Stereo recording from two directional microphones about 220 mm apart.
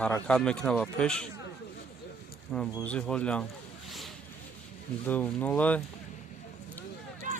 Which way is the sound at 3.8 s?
Centre (ahead or behind).